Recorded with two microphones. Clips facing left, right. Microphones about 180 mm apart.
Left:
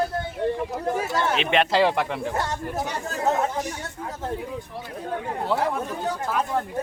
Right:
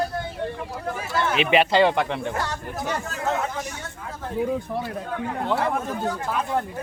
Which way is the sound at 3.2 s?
35° left (ahead or behind).